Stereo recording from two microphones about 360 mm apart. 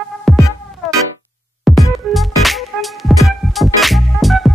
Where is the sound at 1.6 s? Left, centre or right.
Centre.